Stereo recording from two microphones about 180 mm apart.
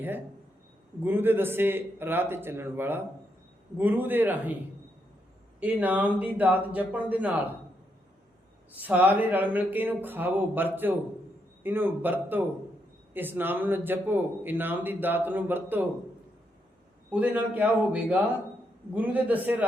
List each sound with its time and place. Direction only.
1.0 s a man's voice: 10° right (ahead or behind)
5.5 s a man's voice: 10° right (ahead or behind)
8.8 s a man's voice: 10° right (ahead or behind)
17.1 s a man's voice: 10° right (ahead or behind)